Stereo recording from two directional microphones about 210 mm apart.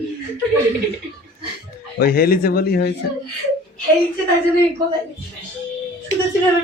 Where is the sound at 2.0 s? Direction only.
45° left (ahead or behind).